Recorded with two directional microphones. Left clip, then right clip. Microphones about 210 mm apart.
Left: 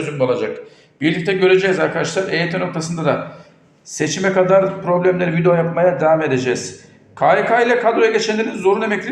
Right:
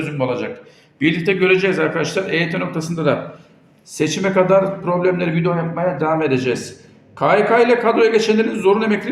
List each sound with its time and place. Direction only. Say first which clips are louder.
0.2 s a man's voice: left 5 dB; centre (ahead or behind)